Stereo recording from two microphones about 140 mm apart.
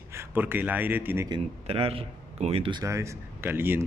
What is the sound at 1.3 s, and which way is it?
A man's voice, 40° right (ahead or behind).